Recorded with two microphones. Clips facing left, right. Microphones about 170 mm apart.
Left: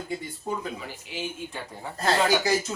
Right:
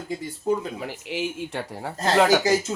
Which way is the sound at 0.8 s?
75° right (ahead or behind).